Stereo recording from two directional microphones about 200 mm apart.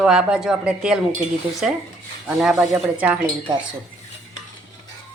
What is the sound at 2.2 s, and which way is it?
Speech, centre (ahead or behind).